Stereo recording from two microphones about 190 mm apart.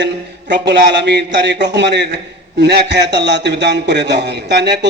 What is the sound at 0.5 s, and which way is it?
A man's voice, 65° right (ahead or behind).